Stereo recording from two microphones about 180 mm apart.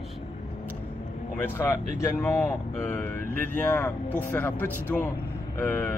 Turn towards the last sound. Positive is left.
turn(degrees=10)  # may be behind; listen again after turning